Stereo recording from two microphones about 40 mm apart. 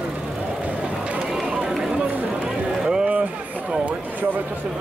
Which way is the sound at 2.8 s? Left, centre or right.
Right.